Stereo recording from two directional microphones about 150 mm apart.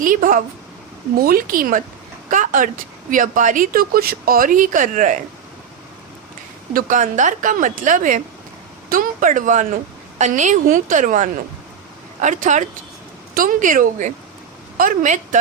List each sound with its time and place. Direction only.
0.0 s a woman's voice: 65° right (ahead or behind)
1.2 s a woman's voice: 75° right (ahead or behind); by 5.2 s 60° right (ahead or behind)
6.7 s a woman's voice: 60° right (ahead or behind)